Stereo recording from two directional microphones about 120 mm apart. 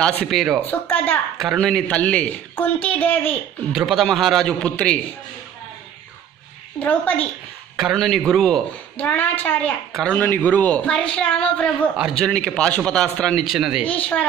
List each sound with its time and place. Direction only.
0.0 s a woman's voice: 10° left (ahead or behind)
0.3 s a man's voice: centre (ahead or behind)
0.7 s a woman's voice: 15° left (ahead or behind)
1.4 s a woman's voice: centre (ahead or behind)
3.7 s a man's voice: centre (ahead or behind)
6.8 s a woman's voice: 15° left (ahead or behind)
7.7 s a man's voice: centre (ahead or behind)
8.9 s a woman's voice: 15° left (ahead or behind); by 13.8 s 5° right (ahead or behind)
13.8 s a woman's voice: 10° left (ahead or behind)